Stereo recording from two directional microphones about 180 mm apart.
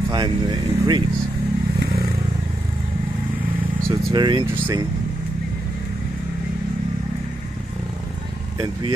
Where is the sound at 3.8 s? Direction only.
25° right (ahead or behind).